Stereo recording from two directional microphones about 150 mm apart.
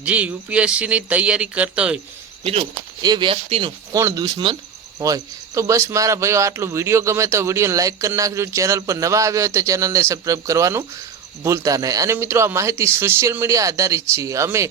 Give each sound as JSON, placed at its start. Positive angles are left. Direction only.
{"t": 0.0, "sound": "speech", "side_deg": -10}
{"t": 2.4, "sound": "speech", "side_deg": -40}
{"t": 3.0, "sound": "speech", "side_deg": -30}
{"t": 3.9, "sound": "speech", "side_deg": -25}